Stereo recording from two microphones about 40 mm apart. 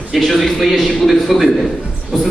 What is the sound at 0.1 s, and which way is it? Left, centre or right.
A man's voice, centre.